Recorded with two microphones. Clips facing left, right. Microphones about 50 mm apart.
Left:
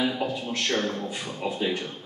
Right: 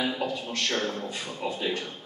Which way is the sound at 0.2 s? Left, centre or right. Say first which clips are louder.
Left 1 dB; centre.